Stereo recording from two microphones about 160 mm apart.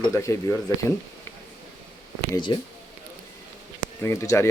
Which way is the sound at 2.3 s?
30° left (ahead or behind).